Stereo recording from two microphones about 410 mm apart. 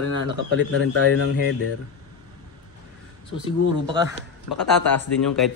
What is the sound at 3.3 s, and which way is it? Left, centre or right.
Speech, centre.